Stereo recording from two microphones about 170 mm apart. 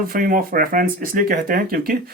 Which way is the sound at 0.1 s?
55° right (ahead or behind).